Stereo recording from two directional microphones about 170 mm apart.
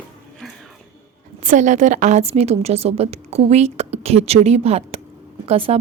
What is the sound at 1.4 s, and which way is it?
A woman's voice, 50° right (ahead or behind).